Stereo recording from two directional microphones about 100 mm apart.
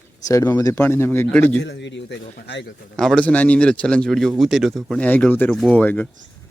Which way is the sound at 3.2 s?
15° left (ahead or behind).